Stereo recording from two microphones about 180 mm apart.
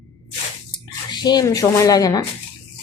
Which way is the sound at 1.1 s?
25° left (ahead or behind).